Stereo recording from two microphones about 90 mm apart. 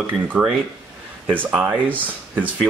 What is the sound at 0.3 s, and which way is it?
A man's voice, 20° right (ahead or behind).